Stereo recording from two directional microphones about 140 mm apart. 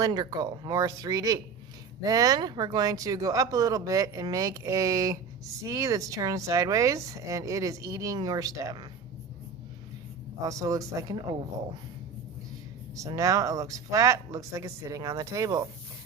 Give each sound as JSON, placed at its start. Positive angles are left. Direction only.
{"t": 0.0, "sound": "speech", "side_deg": -30}
{"t": 10.4, "sound": "speech", "side_deg": -25}
{"t": 13.0, "sound": "speech", "side_deg": -25}